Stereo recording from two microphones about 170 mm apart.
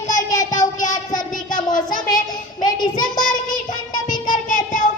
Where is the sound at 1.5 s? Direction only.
50° left (ahead or behind).